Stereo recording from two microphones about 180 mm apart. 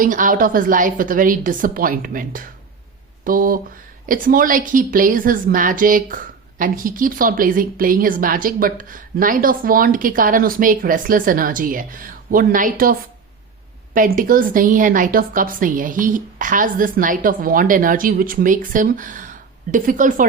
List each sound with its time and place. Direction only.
0.0 s a woman's voice: 50° right (ahead or behind)